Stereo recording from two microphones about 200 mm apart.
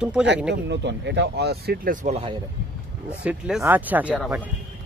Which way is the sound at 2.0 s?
30° right (ahead or behind).